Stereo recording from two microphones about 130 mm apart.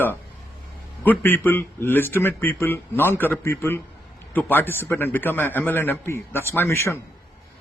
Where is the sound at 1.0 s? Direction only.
15° left (ahead or behind).